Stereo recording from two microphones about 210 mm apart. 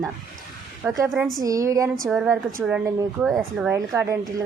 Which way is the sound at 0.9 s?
10° right (ahead or behind).